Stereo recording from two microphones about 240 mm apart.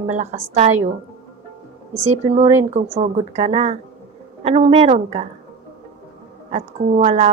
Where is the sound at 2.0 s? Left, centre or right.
Right.